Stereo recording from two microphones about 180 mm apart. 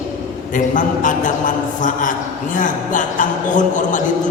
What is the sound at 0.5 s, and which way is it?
A man's voice, 45° left (ahead or behind).